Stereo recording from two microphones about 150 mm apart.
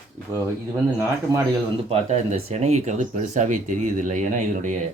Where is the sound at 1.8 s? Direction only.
40° right (ahead or behind).